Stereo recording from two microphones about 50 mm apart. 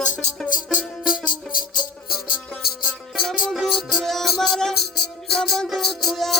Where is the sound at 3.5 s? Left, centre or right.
Centre.